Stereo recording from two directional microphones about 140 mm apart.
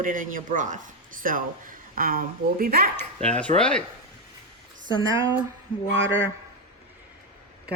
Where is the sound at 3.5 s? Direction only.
5° left (ahead or behind).